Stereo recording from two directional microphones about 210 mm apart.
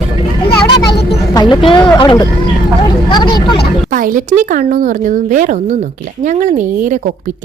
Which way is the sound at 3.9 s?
40° right (ahead or behind).